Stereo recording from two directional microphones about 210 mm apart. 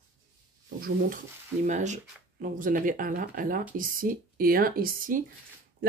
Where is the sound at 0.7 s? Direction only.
45° right (ahead or behind).